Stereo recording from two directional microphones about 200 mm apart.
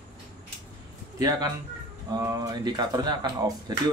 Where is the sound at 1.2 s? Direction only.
20° right (ahead or behind).